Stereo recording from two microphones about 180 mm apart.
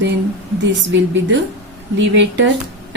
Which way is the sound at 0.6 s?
85° right.